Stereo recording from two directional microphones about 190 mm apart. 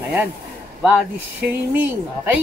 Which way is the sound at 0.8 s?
5° right (ahead or behind).